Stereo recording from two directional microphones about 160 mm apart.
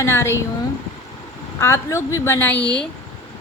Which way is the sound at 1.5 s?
15° left (ahead or behind).